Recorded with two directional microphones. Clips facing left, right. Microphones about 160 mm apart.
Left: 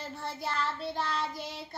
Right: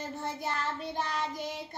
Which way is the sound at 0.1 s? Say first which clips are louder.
Left 1 dB; 20° right (ahead or behind).